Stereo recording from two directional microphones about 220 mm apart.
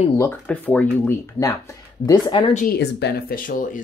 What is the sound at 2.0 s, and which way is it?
Speech, 20° left (ahead or behind).